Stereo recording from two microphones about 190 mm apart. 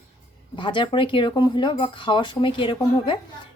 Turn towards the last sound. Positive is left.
turn(degrees=25)  # may be behind; listen again after turning